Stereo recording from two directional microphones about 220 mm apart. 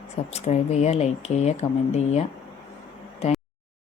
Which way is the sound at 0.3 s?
30° left (ahead or behind).